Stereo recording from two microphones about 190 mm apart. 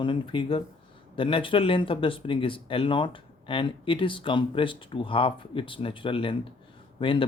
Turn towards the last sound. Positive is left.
turn(degrees=25)  # may be behind; listen again after turning